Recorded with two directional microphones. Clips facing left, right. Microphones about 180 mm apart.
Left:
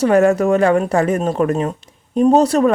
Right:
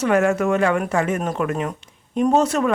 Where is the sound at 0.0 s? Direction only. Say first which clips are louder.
Left 5 dB; 35° left (ahead or behind).